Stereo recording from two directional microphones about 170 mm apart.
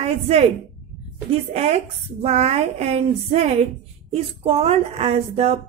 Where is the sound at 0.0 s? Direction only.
35° right (ahead or behind).